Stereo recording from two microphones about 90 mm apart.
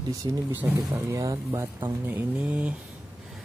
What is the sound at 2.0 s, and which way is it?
Speech, 20° right (ahead or behind).